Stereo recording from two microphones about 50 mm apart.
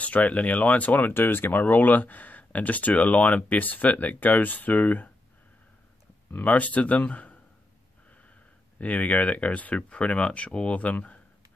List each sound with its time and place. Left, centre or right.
0.0 s speech: left
1.1 s speech: left
6.3 s speech: left
8.7 s speech: left